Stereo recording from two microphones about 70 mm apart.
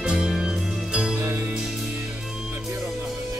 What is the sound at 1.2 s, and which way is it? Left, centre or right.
Music, right.